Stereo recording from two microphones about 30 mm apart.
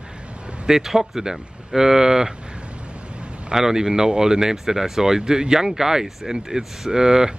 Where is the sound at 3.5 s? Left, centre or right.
Centre.